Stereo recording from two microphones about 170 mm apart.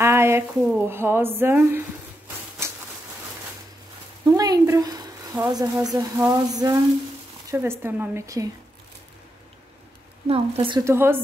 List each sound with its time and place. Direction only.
0.0 s speech: 15° right (ahead or behind)
4.3 s speech: 20° right (ahead or behind)
5.9 s a sound: 15° right (ahead or behind)
7.5 s speech: 15° right (ahead or behind)
10.2 s speech: 35° right (ahead or behind)
10.8 s speech: 15° right (ahead or behind)